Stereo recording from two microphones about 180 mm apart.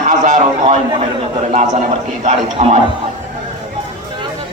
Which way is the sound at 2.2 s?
35° right (ahead or behind).